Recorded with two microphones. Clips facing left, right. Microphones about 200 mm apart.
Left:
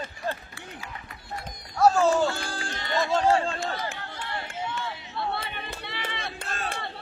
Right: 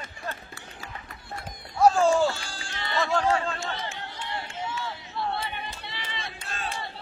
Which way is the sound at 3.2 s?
30° left (ahead or behind).